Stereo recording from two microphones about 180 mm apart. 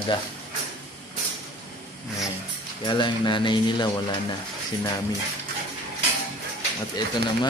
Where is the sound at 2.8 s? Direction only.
25° left (ahead or behind).